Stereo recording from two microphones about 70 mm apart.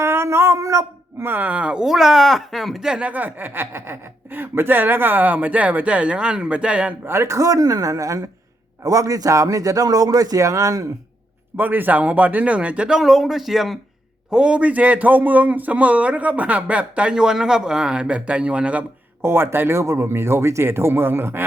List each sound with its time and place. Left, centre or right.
0.0 s a sound: right
1.2 s speech: right; by 3.1 s centre
3.1 s a man's voice: right
7.0 s a man's voice: right
11.5 s a man's voice: right
13.0 s speech: centre
14.3 s a man's voice: centre
19.2 s a man's voice: right